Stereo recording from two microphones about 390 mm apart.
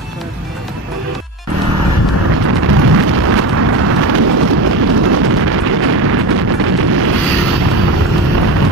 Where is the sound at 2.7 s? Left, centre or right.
Right.